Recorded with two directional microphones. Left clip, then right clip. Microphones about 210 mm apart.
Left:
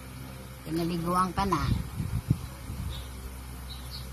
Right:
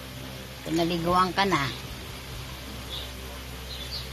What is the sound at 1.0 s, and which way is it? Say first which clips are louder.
Speech: right 4 dB; 30° left (ahead or behind).